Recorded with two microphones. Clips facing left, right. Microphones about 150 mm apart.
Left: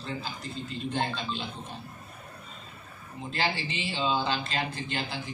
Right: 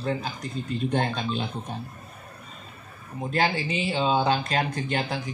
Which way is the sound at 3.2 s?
50° right (ahead or behind).